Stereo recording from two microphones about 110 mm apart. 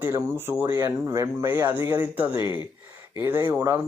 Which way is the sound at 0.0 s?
20° right (ahead or behind).